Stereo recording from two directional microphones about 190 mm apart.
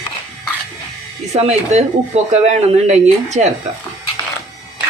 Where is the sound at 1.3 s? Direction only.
35° right (ahead or behind).